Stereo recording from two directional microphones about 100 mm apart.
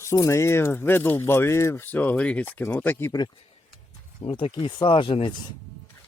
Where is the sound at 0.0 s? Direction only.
30° left (ahead or behind).